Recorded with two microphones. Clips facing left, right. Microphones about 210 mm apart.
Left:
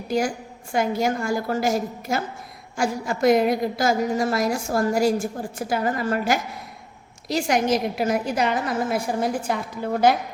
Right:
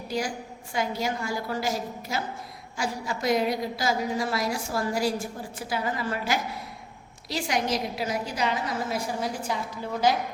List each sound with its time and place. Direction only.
0.7 s a woman's voice: 50° left (ahead or behind)